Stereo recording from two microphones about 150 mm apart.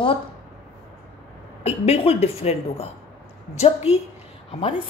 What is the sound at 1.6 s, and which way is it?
A woman's voice, 45° left (ahead or behind).